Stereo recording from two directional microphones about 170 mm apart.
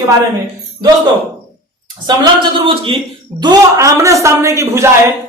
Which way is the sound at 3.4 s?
20° right (ahead or behind).